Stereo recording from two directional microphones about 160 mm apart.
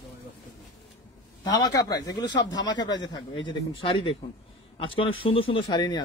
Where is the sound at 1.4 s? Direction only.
25° left (ahead or behind).